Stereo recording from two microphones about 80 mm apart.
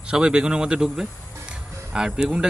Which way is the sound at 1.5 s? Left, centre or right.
Centre.